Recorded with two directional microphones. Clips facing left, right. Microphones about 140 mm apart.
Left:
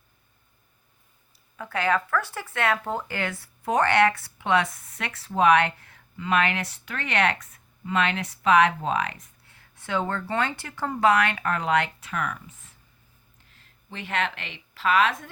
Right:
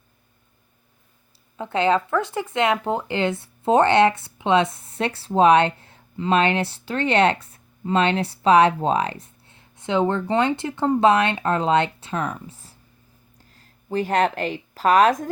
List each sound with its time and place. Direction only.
1.5 s speech: 25° right (ahead or behind); by 15.3 s 40° right (ahead or behind)